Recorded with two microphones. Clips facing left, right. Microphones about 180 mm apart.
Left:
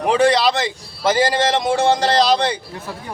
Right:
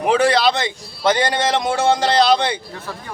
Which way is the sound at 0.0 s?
Centre (ahead or behind).